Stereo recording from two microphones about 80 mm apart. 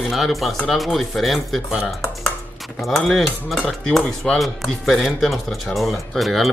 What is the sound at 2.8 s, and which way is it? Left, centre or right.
Speech, centre.